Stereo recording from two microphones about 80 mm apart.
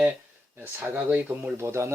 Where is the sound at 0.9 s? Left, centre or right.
Right.